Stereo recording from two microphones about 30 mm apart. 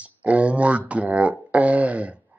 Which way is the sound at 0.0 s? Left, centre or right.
Right.